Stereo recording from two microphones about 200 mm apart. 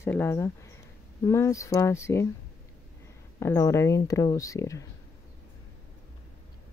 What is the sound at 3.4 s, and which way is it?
Speech, 15° left (ahead or behind).